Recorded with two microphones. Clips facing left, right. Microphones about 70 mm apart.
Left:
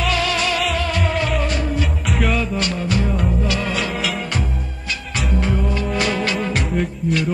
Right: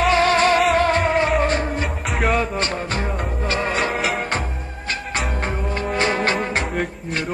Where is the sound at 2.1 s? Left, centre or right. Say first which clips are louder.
Right 2 dB; right.